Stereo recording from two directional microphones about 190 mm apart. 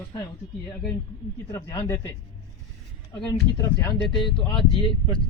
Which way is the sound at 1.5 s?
15° left (ahead or behind).